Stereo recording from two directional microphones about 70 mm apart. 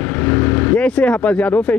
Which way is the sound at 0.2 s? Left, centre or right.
Left.